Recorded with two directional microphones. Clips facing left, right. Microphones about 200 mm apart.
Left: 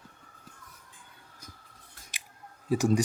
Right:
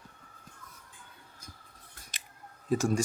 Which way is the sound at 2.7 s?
15° left (ahead or behind).